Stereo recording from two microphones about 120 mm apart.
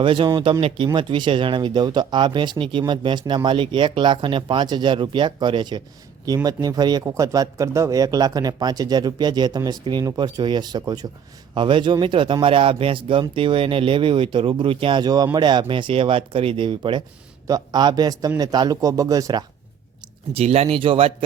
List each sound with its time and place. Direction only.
0.0 s speech: 45° right (ahead or behind)
20.3 s speech: 55° right (ahead or behind)